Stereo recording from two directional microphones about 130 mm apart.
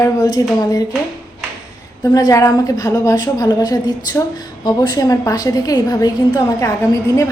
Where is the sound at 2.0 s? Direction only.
30° left (ahead or behind).